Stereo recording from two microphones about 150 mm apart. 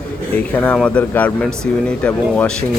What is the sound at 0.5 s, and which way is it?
Speech, 10° left (ahead or behind).